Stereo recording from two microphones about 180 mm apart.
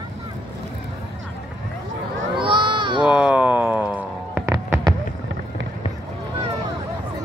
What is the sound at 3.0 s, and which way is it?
Music, 5° right (ahead or behind).